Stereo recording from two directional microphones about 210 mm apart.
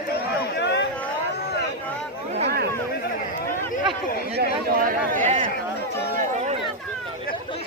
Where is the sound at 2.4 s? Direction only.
50° right (ahead or behind).